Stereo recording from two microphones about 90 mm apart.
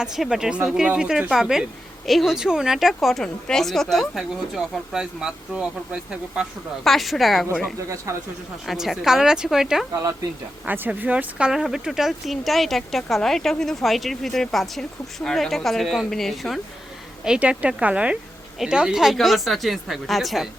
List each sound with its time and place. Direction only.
0.0 s a woman's voice: 5° right (ahead or behind)
6.8 s speech: centre (ahead or behind)
7.8 s speech: 35° right (ahead or behind)
8.6 s speech: centre (ahead or behind)
9.9 s speech: 35° right (ahead or behind)
10.7 s speech: 20° right (ahead or behind); by 16.6 s centre (ahead or behind)
17.2 s a woman's voice: 10° right (ahead or behind)